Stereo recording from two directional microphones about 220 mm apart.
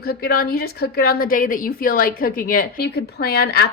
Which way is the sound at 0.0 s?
45° left (ahead or behind).